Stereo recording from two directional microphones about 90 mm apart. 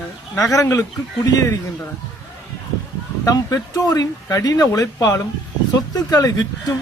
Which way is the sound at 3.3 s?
40° left (ahead or behind).